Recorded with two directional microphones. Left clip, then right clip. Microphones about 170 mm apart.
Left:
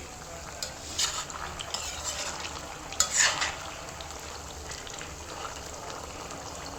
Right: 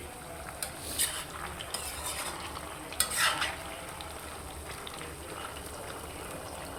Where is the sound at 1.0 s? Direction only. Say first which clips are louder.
Left 5 dB; 5° right (ahead or behind).